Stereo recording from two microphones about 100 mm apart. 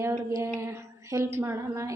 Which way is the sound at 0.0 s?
25° right (ahead or behind).